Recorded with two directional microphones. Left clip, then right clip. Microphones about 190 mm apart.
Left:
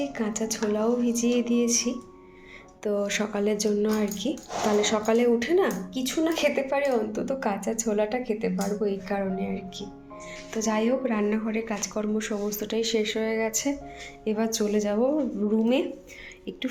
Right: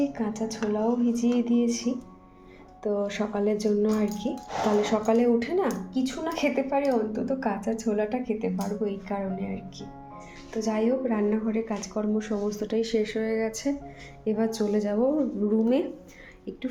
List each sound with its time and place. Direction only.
0.0 s a woman's voice: centre (ahead or behind)